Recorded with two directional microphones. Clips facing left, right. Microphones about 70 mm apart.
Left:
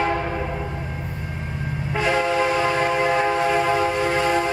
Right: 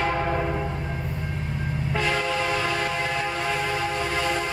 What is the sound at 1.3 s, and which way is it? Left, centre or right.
Train, centre.